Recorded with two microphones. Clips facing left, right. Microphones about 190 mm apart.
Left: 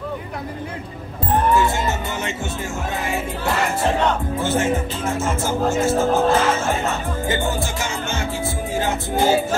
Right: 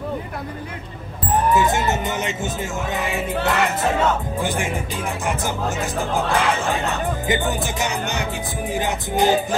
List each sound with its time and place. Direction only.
1.5 s speech: 20° right (ahead or behind)
1.9 s music: 20° right (ahead or behind)
3.4 s music: 20° right (ahead or behind)
4.4 s speech: 15° right (ahead or behind)